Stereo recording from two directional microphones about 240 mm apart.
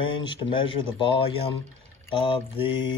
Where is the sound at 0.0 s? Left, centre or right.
Left.